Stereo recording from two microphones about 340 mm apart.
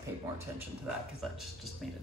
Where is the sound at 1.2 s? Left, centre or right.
Centre.